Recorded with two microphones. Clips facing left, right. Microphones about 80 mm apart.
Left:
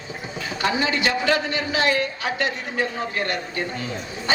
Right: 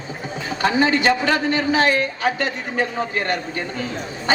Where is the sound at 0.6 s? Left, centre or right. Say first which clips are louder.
Right 5 dB; right.